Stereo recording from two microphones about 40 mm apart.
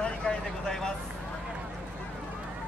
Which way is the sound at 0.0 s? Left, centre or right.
Left.